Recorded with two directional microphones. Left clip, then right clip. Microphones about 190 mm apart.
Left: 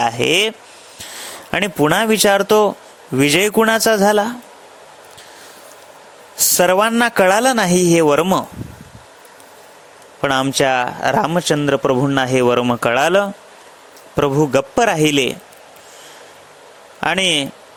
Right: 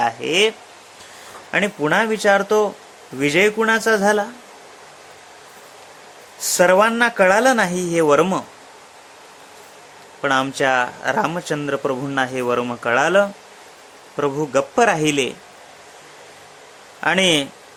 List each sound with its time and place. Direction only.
0.0 s a man's voice: 45° left (ahead or behind)
6.5 s a man's voice: 45° left (ahead or behind)
10.2 s a man's voice: 35° left (ahead or behind)
17.0 s a man's voice: 40° left (ahead or behind)